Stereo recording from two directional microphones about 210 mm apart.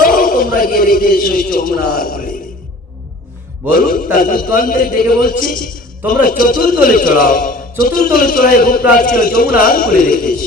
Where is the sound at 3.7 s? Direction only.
40° left (ahead or behind).